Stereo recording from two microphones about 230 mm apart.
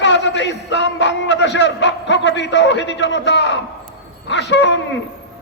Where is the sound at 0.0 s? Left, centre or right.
Left.